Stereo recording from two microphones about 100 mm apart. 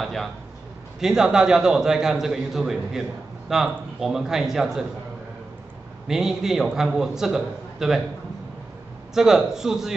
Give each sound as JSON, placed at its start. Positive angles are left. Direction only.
{"t": 0.0, "sound": "a man's voice", "side_deg": 0}
{"t": 6.0, "sound": "a man's voice", "side_deg": -5}
{"t": 9.1, "sound": "a man's voice", "side_deg": -5}